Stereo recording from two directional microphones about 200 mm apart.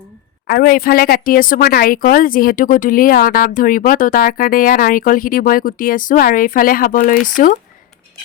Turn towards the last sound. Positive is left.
turn(degrees=40)  # may be behind; listen again after turning